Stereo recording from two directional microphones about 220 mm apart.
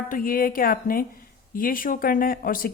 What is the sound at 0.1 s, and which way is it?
A woman's voice, 40° left (ahead or behind).